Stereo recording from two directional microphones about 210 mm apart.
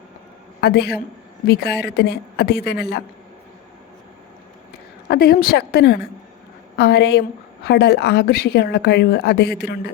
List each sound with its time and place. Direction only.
0.6 s a woman's voice: 50° left (ahead or behind)
5.0 s a woman's voice: 50° left (ahead or behind)